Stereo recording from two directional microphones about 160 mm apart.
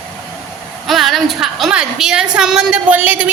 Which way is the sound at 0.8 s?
Centre (ahead or behind).